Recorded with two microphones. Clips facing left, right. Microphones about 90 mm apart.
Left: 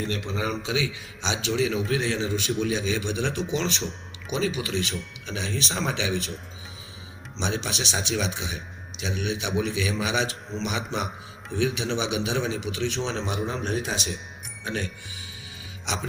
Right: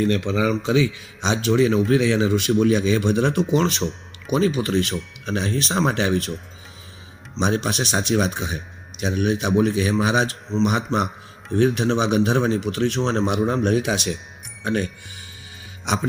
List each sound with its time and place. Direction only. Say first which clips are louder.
0.0 s speech: right 9 dB; 75° right (ahead or behind)
0.4 s speech: right 7 dB; 50° right (ahead or behind)
2.0 s speech: right 8 dB; 65° right (ahead or behind)
2.5 s speech: right 8 dB; 50° right (ahead or behind)
7.3 s speech: right 7 dB; 50° right (ahead or behind)